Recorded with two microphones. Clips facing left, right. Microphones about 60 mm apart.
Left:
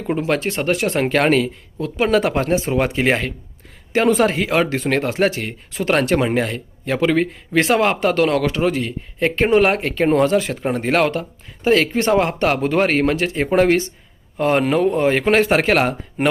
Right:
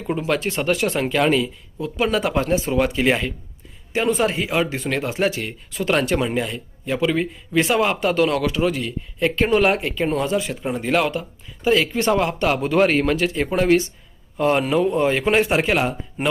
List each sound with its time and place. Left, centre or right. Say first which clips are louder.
0.3 s speech: even; left
3.9 s speech: left 4 dB; left
10.6 s speech: left 3 dB; left